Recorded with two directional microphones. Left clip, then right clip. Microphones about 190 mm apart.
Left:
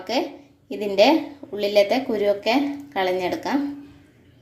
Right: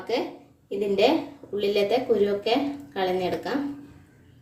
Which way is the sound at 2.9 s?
40° left (ahead or behind).